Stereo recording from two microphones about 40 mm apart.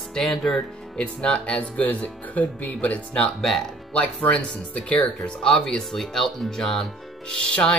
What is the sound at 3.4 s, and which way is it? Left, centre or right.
Speech, centre.